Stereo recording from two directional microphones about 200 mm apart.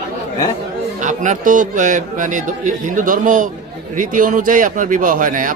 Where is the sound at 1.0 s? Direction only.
40° right (ahead or behind).